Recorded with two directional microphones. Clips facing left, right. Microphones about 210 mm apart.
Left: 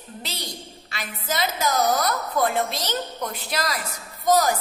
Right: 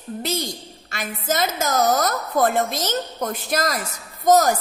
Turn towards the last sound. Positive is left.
turn(degrees=-45)  # may be behind; listen again after turning